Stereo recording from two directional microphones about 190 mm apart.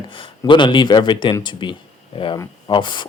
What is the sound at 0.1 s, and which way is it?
Speech, 25° left (ahead or behind).